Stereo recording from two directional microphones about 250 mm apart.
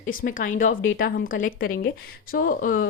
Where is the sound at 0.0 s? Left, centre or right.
Left.